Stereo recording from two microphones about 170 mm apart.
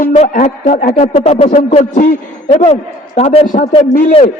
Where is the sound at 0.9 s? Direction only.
35° left (ahead or behind).